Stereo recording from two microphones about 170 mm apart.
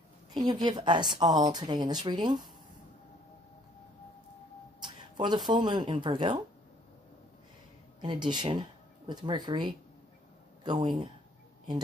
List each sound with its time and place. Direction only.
0.3 s a woman's voice: 25° right (ahead or behind)
4.8 s speech: 25° right (ahead or behind)
8.0 s a woman's voice: 25° right (ahead or behind)